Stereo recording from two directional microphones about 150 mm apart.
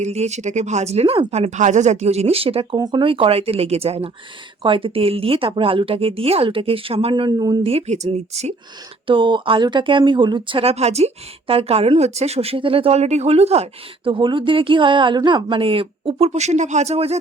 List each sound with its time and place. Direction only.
0.0 s a woman's voice: 50° right (ahead or behind)
2.7 s speech: 30° right (ahead or behind)
7.7 s a woman's voice: 45° right (ahead or behind)
9.0 s speech: 35° right (ahead or behind)